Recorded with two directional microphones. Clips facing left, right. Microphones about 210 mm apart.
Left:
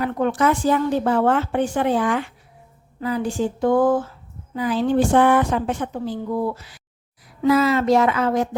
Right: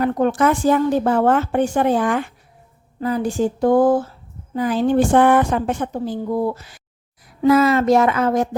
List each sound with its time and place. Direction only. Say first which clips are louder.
0.0 s a woman's voice: right 3 dB; 45° right (ahead or behind)
4.5 s a woman's voice: right 2 dB; 45° right (ahead or behind)